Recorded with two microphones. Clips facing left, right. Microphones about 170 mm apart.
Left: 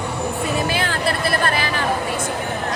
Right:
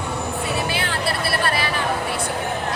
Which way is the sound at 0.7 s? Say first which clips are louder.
Left 2 dB; 45° left (ahead or behind).